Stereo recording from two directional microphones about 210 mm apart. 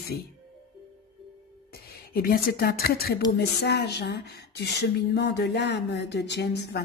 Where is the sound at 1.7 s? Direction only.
45° left (ahead or behind).